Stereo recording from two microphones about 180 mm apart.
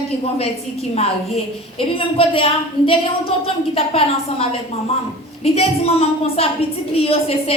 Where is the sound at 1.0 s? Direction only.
35° left (ahead or behind).